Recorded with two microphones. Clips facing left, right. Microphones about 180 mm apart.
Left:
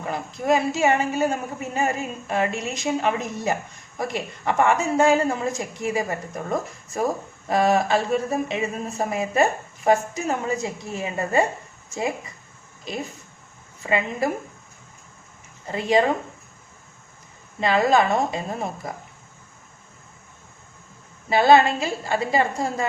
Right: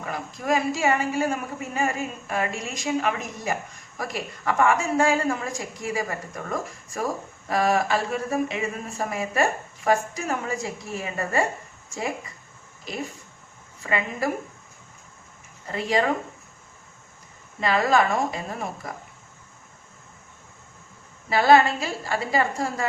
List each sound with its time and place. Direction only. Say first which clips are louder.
0.0 s a woman's voice: left 4 dB; 25° left (ahead or behind)
13.8 s a woman's voice: left 3 dB; 20° left (ahead or behind)
15.6 s a woman's voice: left 4 dB; 20° left (ahead or behind)
17.6 s a woman's voice: left 2 dB; 20° left (ahead or behind)
21.2 s a woman's voice: left 2 dB; 20° left (ahead or behind)